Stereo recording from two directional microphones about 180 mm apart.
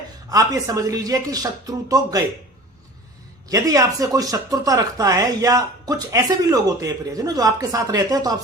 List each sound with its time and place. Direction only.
0.3 s speech: 20° right (ahead or behind)
3.5 s speech: 20° right (ahead or behind)